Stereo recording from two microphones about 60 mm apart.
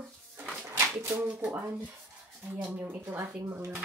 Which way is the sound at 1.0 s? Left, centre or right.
Right.